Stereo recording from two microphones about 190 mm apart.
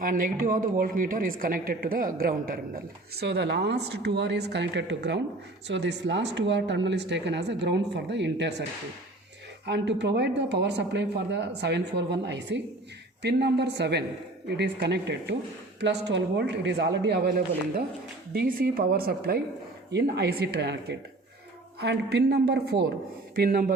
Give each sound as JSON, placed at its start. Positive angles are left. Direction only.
{"t": 0.0, "sound": "a woman's voice", "side_deg": -45}
{"t": 9.6, "sound": "a woman's voice", "side_deg": -65}